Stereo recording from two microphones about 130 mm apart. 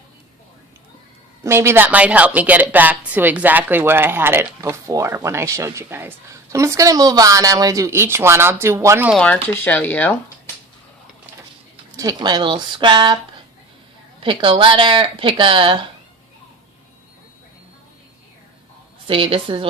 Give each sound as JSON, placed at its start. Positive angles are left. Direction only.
{"t": 1.5, "sound": "a woman's voice", "side_deg": -20}
{"t": 9.1, "sound": "speech", "side_deg": 10}
{"t": 11.9, "sound": "speech", "side_deg": -30}
{"t": 14.2, "sound": "speech", "side_deg": -45}
{"t": 19.0, "sound": "a woman's voice", "side_deg": -40}